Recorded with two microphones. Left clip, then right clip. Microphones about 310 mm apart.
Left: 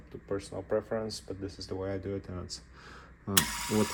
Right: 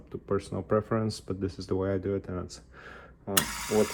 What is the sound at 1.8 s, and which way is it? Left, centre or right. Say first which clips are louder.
Speech: right 4 dB; centre.